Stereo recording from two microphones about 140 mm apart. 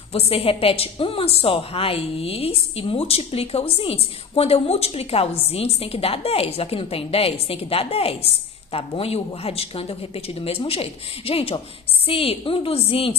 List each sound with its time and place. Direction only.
0.1 s a woman's voice: 45° left (ahead or behind)